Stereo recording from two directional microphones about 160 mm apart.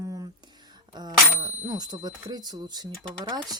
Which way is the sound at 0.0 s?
20° right (ahead or behind).